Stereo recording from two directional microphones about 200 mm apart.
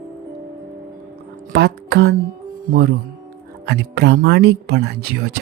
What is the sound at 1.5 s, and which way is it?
Speech, 60° right (ahead or behind).